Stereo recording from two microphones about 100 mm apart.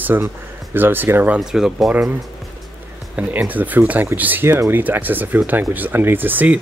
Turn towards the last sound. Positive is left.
turn(degrees=-15)  # may be behind; listen again after turning